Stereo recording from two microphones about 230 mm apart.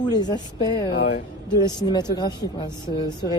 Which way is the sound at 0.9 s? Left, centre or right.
Left.